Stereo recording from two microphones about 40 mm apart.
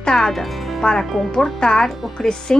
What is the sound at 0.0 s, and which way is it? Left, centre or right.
Music, centre.